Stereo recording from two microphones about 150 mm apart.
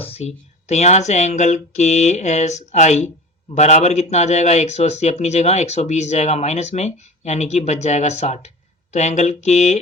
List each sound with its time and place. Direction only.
0.0 s speech: 45° left (ahead or behind)